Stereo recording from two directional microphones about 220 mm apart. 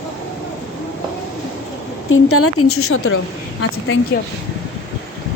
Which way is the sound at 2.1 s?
75° left (ahead or behind).